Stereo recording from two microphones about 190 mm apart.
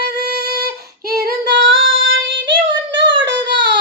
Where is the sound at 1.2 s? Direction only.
60° right (ahead or behind).